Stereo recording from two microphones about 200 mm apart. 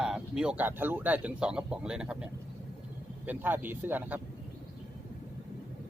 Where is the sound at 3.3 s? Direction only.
10° right (ahead or behind).